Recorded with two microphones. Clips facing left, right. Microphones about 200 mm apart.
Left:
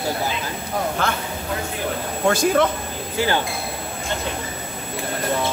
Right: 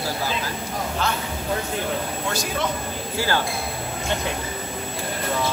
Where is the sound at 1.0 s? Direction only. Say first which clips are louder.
Even; 55° left (ahead or behind).